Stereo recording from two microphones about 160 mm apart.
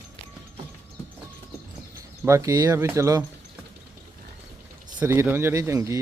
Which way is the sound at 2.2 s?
20° right (ahead or behind).